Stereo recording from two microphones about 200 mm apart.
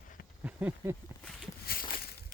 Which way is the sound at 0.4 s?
5° right (ahead or behind).